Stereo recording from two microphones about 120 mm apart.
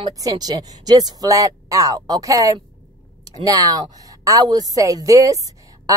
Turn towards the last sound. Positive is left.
turn(degrees=-30)  # may be behind; listen again after turning